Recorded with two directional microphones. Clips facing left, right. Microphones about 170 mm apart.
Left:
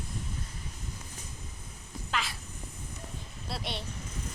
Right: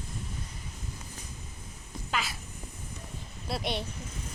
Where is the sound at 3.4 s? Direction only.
50° right (ahead or behind).